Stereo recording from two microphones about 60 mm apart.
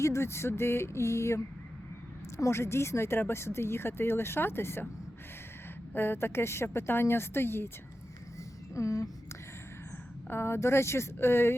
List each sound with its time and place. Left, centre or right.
0.0 s speech: left
2.4 s speech: left
5.9 s speech: left
8.7 s a sound: left
10.2 s speech: left